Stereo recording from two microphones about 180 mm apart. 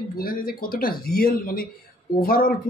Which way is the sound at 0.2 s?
55° left (ahead or behind).